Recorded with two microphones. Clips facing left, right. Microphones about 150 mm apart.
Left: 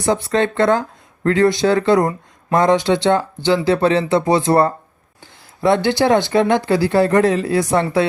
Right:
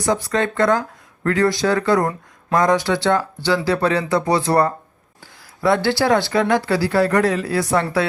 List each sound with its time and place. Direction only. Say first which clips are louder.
0.0 s speech: left 3 dB; 25° left (ahead or behind)